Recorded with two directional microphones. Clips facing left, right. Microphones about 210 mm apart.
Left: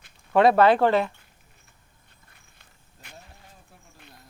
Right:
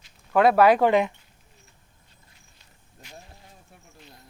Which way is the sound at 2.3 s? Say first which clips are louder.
Even; 55° left (ahead or behind).